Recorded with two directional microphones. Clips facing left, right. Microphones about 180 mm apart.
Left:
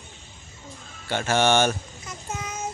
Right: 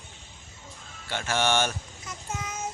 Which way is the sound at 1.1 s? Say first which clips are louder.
Left 5 dB; 55° left (ahead or behind).